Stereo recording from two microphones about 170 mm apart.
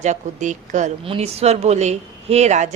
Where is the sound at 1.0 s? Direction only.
35° right (ahead or behind).